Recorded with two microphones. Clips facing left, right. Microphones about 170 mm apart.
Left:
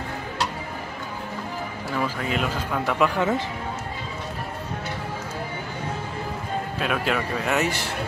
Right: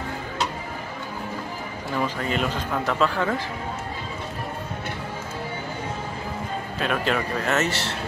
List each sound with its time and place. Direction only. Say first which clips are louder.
2.0 s speech: right 1 dB; 5° left (ahead or behind)
3.2 s speech: left 2 dB; 20° left (ahead or behind)
6.8 s speech: right 2 dB; 5° left (ahead or behind)